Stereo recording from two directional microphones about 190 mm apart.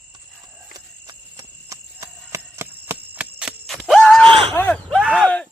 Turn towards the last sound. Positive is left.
turn(degrees=5)  # may be behind; listen again after turning